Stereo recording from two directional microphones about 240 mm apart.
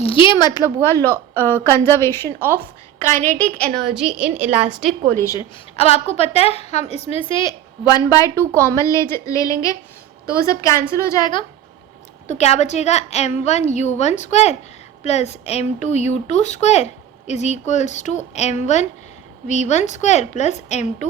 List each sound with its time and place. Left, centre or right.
0.0 s a woman's voice: left; by 4.9 s centre
5.1 s a woman's voice: centre
5.7 s a woman's voice: left
12.3 s a woman's voice: left